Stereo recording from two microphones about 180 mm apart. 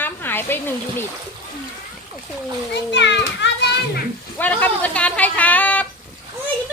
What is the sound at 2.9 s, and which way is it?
Speech, 75° left (ahead or behind).